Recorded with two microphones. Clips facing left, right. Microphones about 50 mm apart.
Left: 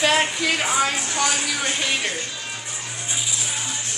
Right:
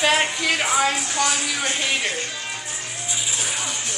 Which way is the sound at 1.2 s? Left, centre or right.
Centre.